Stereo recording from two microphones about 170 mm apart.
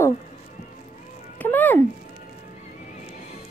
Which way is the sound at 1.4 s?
10° left (ahead or behind).